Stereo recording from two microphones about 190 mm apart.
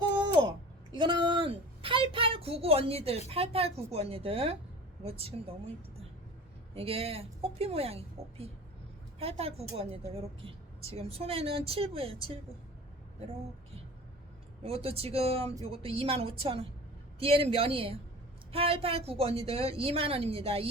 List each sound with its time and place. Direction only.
0.9 s a sound: 25° right (ahead or behind)
3.2 s a woman's voice: 30° right (ahead or behind)
6.7 s a woman's voice: 30° right (ahead or behind)
14.6 s a woman's voice: 30° right (ahead or behind)